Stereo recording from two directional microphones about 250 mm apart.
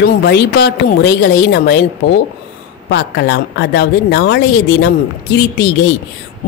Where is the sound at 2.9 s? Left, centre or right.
Left.